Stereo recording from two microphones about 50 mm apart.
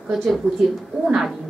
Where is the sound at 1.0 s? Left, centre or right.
Centre.